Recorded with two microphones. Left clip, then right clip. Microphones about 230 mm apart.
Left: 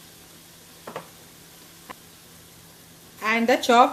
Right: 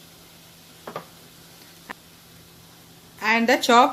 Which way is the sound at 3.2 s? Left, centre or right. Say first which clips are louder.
Right 1 dB; right.